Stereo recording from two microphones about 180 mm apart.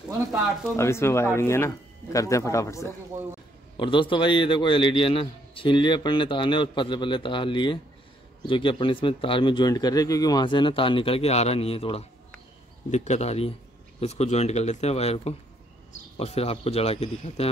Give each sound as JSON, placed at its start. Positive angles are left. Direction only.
{"t": 0.7, "sound": "speech", "side_deg": 15}
{"t": 3.7, "sound": "a man's voice", "side_deg": 25}